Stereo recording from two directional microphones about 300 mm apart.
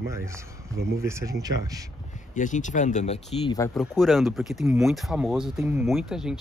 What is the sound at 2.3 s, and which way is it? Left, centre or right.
Speech, left.